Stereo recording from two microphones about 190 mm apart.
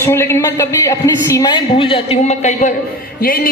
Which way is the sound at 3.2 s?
50° left (ahead or behind).